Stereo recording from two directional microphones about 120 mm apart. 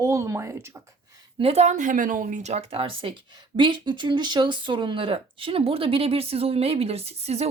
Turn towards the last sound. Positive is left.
turn(degrees=-60)  # may be behind; listen again after turning